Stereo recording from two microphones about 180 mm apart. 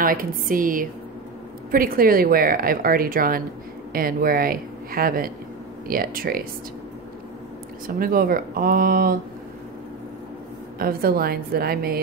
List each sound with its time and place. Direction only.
0.0 s speech: 50° right (ahead or behind)
7.8 s speech: 55° right (ahead or behind)
10.8 s a woman's voice: 55° right (ahead or behind)